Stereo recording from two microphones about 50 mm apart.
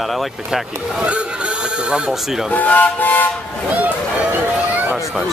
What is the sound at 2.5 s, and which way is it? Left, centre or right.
Speech, left.